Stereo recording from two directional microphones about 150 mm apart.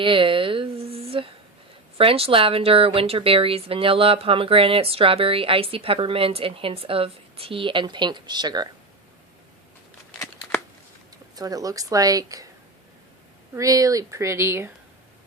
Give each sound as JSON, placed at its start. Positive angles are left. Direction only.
{"t": 0.0, "sound": "speech", "side_deg": -35}
{"t": 11.3, "sound": "speech", "side_deg": -25}
{"t": 13.5, "sound": "speech", "side_deg": -20}